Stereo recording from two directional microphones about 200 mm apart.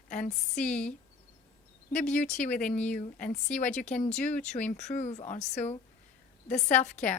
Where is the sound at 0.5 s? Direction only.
5° left (ahead or behind).